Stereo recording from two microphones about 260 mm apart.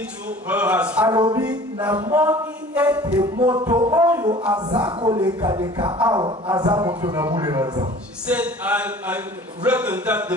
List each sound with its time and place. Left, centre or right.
0.5 s a man's voice: centre
1.1 s speech: centre
3.2 s a man's voice: centre
4.6 s speech: centre